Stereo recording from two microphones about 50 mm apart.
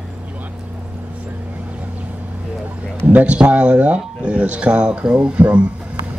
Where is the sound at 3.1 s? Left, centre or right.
Right.